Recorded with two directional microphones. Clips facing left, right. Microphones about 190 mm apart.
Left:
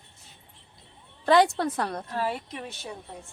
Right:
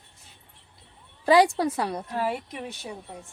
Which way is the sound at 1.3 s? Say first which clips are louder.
Right 2 dB; 10° right (ahead or behind).